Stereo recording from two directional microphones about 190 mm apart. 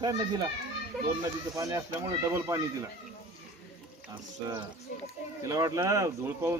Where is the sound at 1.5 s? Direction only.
20° right (ahead or behind).